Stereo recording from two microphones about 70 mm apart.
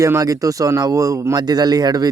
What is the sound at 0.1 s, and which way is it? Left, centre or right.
Speech, right.